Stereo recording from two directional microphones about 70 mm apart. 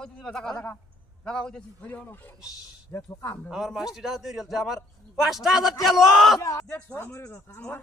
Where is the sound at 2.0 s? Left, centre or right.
Left.